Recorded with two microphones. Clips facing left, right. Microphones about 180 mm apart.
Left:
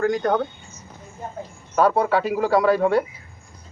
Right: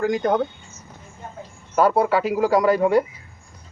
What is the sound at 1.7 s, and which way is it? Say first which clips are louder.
Speech: right 1 dB; 5° right (ahead or behind).